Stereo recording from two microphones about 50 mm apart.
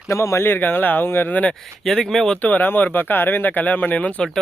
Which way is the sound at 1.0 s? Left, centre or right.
Left.